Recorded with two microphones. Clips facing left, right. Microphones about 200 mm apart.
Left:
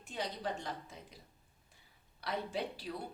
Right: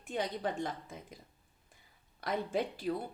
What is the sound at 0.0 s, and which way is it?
Speech, 50° right (ahead or behind).